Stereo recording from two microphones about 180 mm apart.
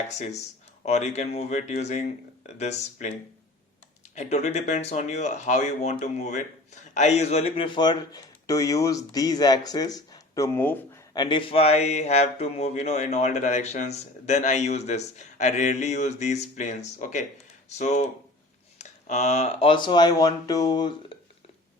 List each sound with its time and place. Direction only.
0.1 s speech: 40° left (ahead or behind)
4.1 s speech: 40° left (ahead or behind); by 11.0 s 10° left (ahead or behind)
11.1 s speech: 25° left (ahead or behind)